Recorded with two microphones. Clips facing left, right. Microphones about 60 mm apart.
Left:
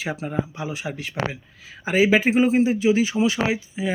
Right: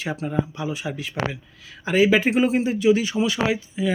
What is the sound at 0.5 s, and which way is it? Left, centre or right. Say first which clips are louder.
Speech: right 1 dB; centre.